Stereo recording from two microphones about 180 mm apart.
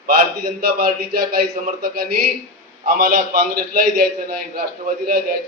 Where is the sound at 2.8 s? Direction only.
45° right (ahead or behind).